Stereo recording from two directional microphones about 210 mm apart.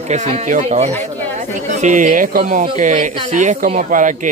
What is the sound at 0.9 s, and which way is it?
Speech, 10° left (ahead or behind).